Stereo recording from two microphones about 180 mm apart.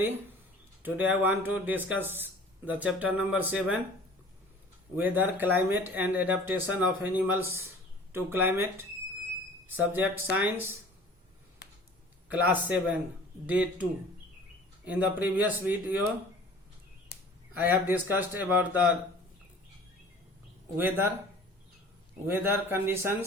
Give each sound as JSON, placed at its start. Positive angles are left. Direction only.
{"t": 0.8, "sound": "speech", "side_deg": -10}
{"t": 4.9, "sound": "speech", "side_deg": -10}
{"t": 9.6, "sound": "speech", "side_deg": -10}
{"t": 11.6, "sound": "a sound", "side_deg": 70}
{"t": 12.3, "sound": "speech", "side_deg": -10}
{"t": 14.8, "sound": "speech", "side_deg": -10}
{"t": 17.6, "sound": "speech", "side_deg": -10}
{"t": 20.7, "sound": "speech", "side_deg": -10}
{"t": 22.3, "sound": "speech", "side_deg": -15}